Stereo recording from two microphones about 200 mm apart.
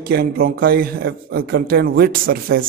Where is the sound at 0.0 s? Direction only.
50° right (ahead or behind).